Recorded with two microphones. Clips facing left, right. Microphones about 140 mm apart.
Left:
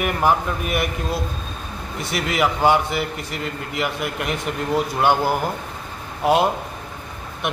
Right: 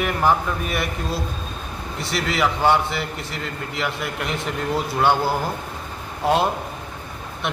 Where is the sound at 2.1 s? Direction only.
10° left (ahead or behind).